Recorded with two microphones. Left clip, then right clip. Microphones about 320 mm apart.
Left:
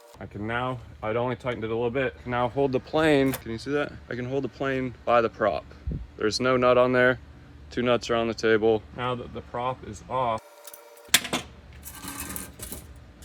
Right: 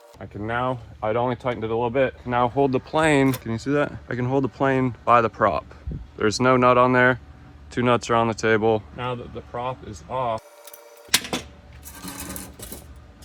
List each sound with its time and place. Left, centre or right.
0.2 s speech: centre
9.0 s speech: centre
10.1 s keys jangling: centre